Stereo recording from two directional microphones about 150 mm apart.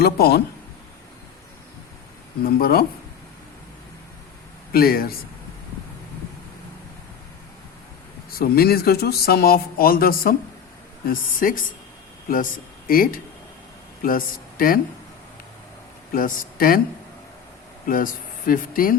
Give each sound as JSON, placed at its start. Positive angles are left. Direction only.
{"t": 0.0, "sound": "speech", "side_deg": 90}
{"t": 2.4, "sound": "speech", "side_deg": 85}
{"t": 4.7, "sound": "speech", "side_deg": 85}
{"t": 8.3, "sound": "speech", "side_deg": 90}
{"t": 16.1, "sound": "speech", "side_deg": 70}
{"t": 17.8, "sound": "speech", "side_deg": 65}